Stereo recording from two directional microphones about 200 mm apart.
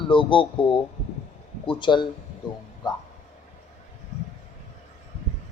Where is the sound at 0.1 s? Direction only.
25° left (ahead or behind).